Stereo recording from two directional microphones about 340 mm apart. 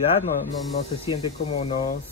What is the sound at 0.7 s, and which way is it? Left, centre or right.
Speech, centre.